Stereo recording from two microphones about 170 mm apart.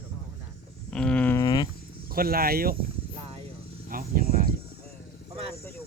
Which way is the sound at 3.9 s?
60° right (ahead or behind).